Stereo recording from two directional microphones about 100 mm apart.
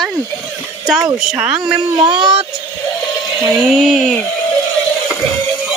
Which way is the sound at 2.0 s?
50° right (ahead or behind).